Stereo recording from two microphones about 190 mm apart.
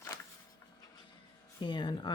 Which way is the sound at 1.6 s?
25° left (ahead or behind).